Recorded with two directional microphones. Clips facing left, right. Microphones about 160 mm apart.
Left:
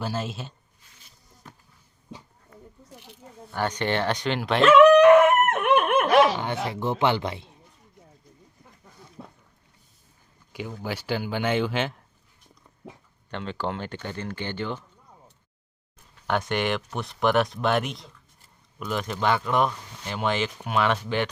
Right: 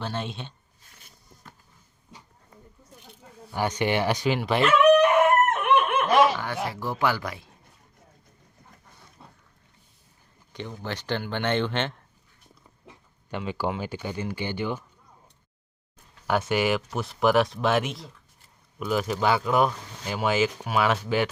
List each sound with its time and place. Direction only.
0.0 s speech: 5° left (ahead or behind)
3.5 s speech: 10° right (ahead or behind)
4.6 s chicken: 90° left
5.7 s chicken: 50° left (ahead or behind)
6.3 s speech: 20° left (ahead or behind)
10.5 s speech: 10° left (ahead or behind)
13.3 s speech: 10° right (ahead or behind)
16.2 s speech: 5° right (ahead or behind)